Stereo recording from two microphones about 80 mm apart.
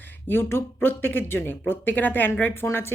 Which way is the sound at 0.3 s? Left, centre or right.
Left.